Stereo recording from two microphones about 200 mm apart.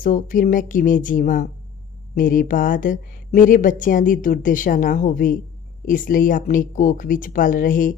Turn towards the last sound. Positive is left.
turn(degrees=45)  # may be behind; listen again after turning